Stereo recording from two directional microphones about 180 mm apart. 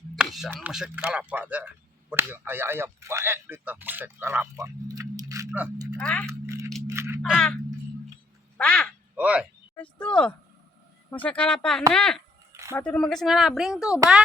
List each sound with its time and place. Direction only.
0.2 s a sound: centre (ahead or behind)
0.5 s speech: 5° right (ahead or behind)
6.0 s a woman's voice: 5° left (ahead or behind)
6.2 s a sound: 15° right (ahead or behind)
7.3 s a woman's voice: 5° left (ahead or behind)
8.5 s speech: 5° left (ahead or behind)
9.1 s speech: 5° right (ahead or behind)
9.7 s a sound: 5° left (ahead or behind)
11.1 s a woman's voice: 10° left (ahead or behind)